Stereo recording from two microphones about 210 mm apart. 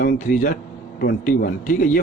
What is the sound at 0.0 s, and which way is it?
A man's voice, 45° left (ahead or behind).